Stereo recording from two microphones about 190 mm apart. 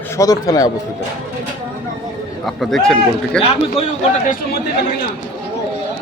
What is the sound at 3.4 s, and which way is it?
Speech, 30° left (ahead or behind).